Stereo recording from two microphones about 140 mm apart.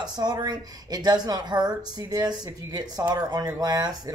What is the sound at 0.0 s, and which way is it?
Speech, 30° right (ahead or behind).